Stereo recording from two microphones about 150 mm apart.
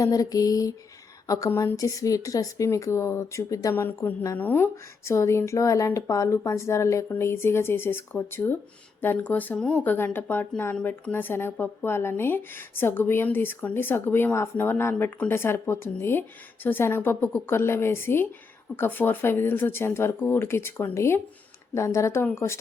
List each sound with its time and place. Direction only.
0.0 s a woman's voice: 25° left (ahead or behind)